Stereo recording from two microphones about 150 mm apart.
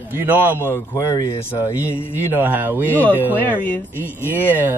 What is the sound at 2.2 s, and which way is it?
Speech, 10° right (ahead or behind).